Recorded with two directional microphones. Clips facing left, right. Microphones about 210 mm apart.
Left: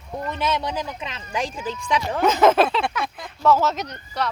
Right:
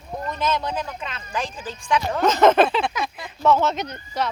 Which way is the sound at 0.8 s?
20° left (ahead or behind).